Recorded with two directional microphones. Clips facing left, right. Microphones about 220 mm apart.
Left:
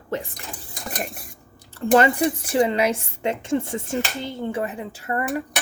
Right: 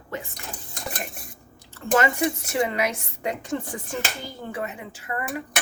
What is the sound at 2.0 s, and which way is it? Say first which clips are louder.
A woman's voice: left 2 dB; 30° left (ahead or behind).